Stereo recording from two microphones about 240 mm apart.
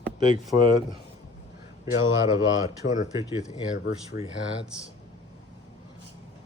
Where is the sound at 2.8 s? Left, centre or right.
Centre.